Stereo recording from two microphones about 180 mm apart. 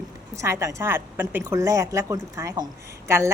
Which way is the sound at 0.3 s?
15° right (ahead or behind).